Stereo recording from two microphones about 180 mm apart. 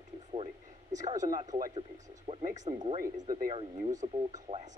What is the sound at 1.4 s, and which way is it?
A man's voice, 40° right (ahead or behind).